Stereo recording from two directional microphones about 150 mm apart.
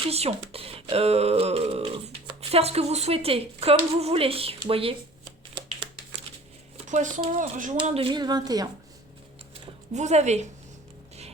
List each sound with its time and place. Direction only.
0.1 s speech: 40° right (ahead or behind)
6.8 s speech: 55° right (ahead or behind)
7.9 s a woman's voice: 40° right (ahead or behind)
9.9 s speech: 50° right (ahead or behind)